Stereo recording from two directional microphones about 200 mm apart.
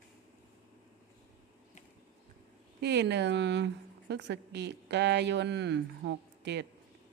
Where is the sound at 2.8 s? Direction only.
60° right (ahead or behind).